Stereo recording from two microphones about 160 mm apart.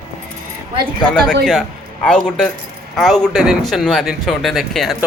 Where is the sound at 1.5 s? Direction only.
5° left (ahead or behind).